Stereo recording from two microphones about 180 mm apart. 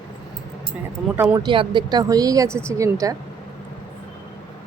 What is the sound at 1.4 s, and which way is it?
Speech, 25° right (ahead or behind).